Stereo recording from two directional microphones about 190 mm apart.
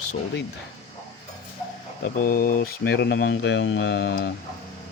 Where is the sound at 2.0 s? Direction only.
50° left (ahead or behind).